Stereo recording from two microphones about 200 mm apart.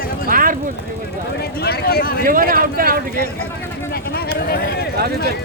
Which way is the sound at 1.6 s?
50° left (ahead or behind).